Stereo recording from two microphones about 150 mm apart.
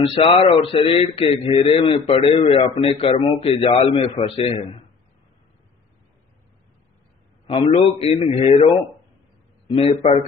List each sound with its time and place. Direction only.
0.1 s a man's voice: 35° left (ahead or behind)
7.4 s a man's voice: 45° left (ahead or behind)
9.7 s a man's voice: 35° left (ahead or behind)